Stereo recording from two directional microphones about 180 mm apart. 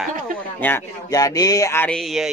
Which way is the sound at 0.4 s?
10° left (ahead or behind).